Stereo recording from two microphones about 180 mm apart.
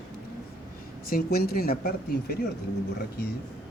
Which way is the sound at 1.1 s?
60° left (ahead or behind).